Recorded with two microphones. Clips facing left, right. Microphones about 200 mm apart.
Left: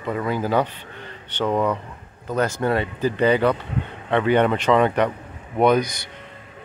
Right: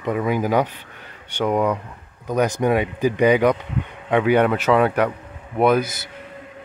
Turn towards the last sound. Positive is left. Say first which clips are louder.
# even
turn(degrees=-5)  # may be behind; listen again after turning